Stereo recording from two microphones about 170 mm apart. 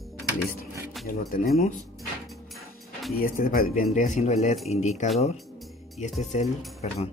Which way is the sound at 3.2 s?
55° left (ahead or behind).